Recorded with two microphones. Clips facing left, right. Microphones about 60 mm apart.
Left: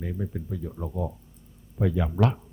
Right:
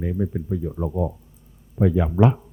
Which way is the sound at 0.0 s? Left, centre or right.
Centre.